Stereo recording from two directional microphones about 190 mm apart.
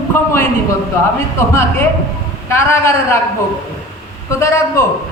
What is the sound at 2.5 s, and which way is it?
Speech, 15° left (ahead or behind).